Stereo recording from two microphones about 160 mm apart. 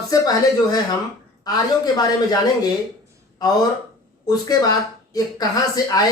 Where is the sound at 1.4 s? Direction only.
25° left (ahead or behind).